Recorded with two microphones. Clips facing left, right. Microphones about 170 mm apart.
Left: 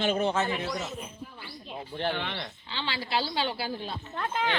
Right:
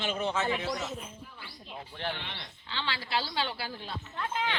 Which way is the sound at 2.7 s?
15° left (ahead or behind).